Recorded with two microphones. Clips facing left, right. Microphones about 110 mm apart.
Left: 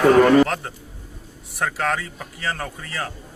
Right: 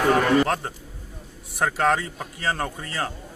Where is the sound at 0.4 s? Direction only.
20° right (ahead or behind).